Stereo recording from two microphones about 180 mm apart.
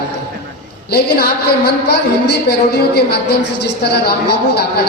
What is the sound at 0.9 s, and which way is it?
A woman's voice, 65° left (ahead or behind).